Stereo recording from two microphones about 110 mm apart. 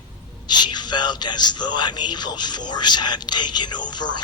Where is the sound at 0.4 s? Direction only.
40° left (ahead or behind).